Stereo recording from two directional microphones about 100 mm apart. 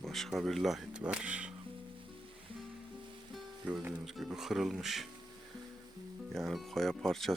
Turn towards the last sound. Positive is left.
turn(degrees=5)  # may be behind; listen again after turning